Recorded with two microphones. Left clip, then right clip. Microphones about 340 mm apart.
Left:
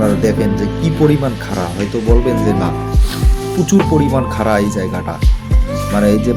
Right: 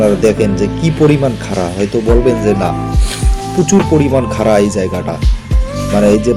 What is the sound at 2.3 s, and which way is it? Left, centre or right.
Music, left.